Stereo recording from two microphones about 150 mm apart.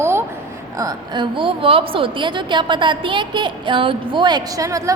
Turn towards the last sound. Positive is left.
turn(degrees=-20)  # may be behind; listen again after turning